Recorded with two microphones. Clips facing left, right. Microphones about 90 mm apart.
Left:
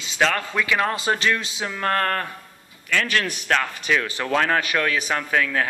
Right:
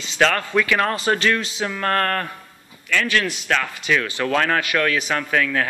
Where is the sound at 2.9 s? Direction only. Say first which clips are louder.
Right 2 dB; 35° left (ahead or behind).